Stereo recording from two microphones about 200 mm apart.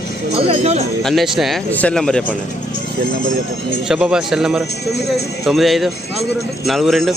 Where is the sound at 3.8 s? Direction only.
5° right (ahead or behind).